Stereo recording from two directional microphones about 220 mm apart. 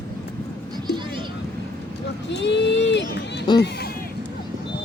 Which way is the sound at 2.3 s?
50° left (ahead or behind).